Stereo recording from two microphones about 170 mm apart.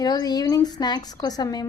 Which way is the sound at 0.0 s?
25° left (ahead or behind).